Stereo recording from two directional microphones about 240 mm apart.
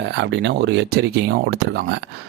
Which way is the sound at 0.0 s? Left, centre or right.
Right.